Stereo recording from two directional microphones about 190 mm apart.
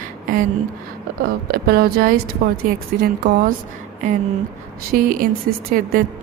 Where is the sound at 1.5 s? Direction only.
55° right (ahead or behind).